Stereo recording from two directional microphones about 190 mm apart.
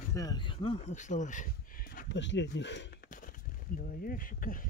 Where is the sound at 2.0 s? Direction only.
70° left (ahead or behind).